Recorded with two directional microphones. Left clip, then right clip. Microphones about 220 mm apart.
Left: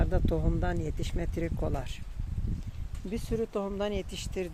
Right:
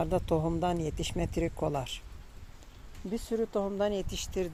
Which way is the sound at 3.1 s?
10° right (ahead or behind).